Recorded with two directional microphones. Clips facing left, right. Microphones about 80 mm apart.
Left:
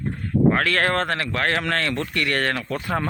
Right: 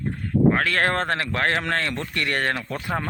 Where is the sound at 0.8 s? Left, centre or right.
Right.